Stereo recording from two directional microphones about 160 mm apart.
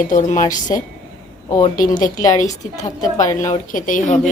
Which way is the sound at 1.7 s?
55° left (ahead or behind).